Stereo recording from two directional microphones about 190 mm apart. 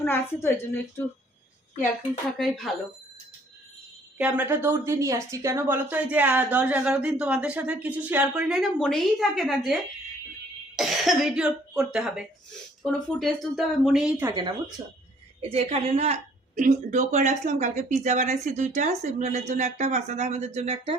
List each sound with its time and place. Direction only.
0.0 s a woman's voice: 10° left (ahead or behind)
2.4 s speech: centre (ahead or behind)
4.2 s a woman's voice: 10° right (ahead or behind)
10.8 s speech: centre (ahead or behind)
14.3 s speech: 20° right (ahead or behind)
15.4 s speech: 30° right (ahead or behind)